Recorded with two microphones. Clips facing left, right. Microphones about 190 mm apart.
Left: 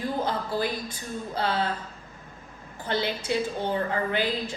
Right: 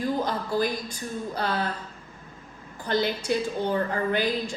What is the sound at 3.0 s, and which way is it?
A woman's voice, 20° left (ahead or behind).